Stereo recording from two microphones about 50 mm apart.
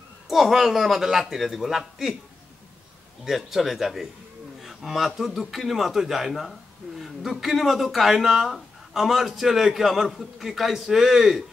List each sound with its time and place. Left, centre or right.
0.3 s speech: centre
3.3 s speech: centre